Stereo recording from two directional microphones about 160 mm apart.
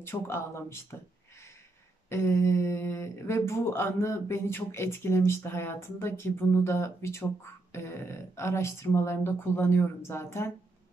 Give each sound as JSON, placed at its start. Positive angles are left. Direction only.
{"t": 0.0, "sound": "speech", "side_deg": 15}
{"t": 2.0, "sound": "speech", "side_deg": 15}